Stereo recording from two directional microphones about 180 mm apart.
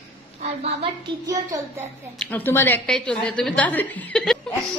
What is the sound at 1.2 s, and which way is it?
Speech, 20° right (ahead or behind).